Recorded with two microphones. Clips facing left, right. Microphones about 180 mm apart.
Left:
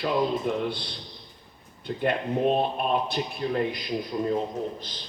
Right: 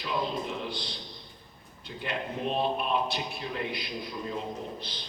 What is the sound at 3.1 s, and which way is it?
Speech, 45° left (ahead or behind).